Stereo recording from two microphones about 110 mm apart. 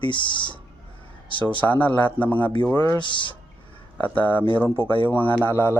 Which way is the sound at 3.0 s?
45° left (ahead or behind).